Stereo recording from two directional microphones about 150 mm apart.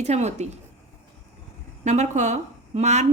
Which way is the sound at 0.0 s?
45° right (ahead or behind).